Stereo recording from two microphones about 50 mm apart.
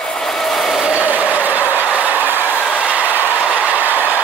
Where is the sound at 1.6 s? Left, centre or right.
Left.